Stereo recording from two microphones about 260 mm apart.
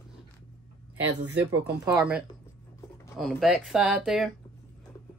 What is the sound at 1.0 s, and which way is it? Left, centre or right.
Speech, right.